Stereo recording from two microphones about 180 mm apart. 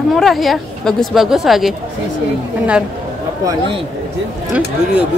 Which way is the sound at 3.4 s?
25° right (ahead or behind).